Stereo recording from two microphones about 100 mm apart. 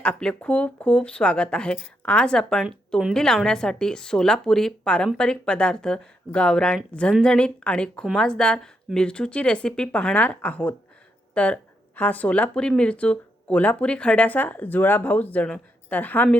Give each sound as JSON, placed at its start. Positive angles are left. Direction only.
{"t": 0.0, "sound": "speech", "side_deg": 10}